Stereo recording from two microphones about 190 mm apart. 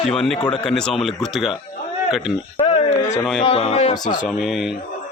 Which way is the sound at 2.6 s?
30° left (ahead or behind).